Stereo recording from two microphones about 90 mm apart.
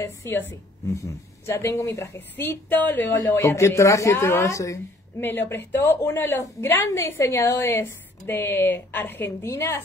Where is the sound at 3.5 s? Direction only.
35° left (ahead or behind).